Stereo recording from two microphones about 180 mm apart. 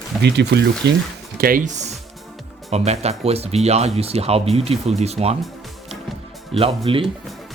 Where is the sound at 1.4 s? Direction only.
50° right (ahead or behind); by 5.4 s 35° right (ahead or behind).